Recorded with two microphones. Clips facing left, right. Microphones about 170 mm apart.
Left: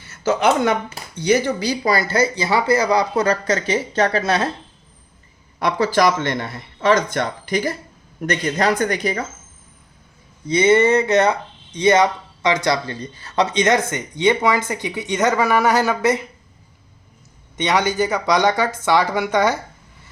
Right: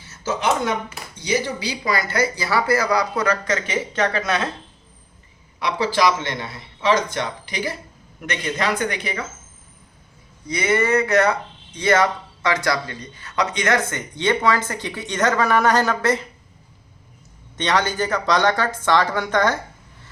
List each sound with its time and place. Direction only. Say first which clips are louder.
0.0 s speech: left 6 dB; 65° left (ahead or behind)
1.2 s speech: left 6 dB; 50° left (ahead or behind); by 4.4 s 30° left (ahead or behind)
5.5 s speech: left 3 dB; 45° left (ahead or behind)
10.4 s speech: left 6 dB; 25° left (ahead or behind)
17.6 s speech: left 3 dB; 10° left (ahead or behind)